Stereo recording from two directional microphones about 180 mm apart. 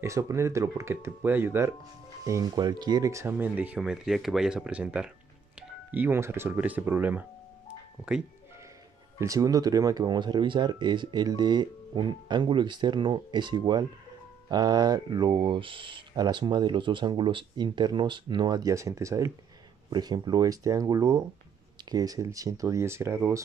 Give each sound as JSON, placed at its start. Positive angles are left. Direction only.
{"t": 0.0, "sound": "speech", "side_deg": -15}
{"t": 9.2, "sound": "speech", "side_deg": -20}